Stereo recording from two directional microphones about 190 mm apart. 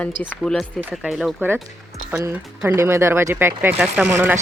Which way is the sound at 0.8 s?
5° right (ahead or behind).